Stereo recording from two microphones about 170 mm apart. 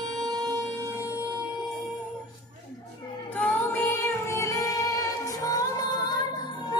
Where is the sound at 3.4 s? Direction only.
10° left (ahead or behind).